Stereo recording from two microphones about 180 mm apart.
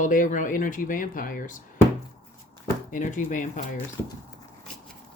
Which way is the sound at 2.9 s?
45° left (ahead or behind).